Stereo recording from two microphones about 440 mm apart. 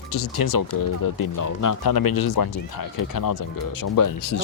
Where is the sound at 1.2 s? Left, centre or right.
Left.